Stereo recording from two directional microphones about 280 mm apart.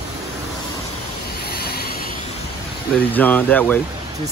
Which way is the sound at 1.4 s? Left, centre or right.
Left.